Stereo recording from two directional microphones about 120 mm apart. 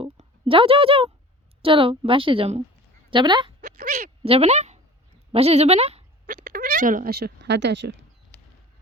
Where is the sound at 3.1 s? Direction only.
40° right (ahead or behind).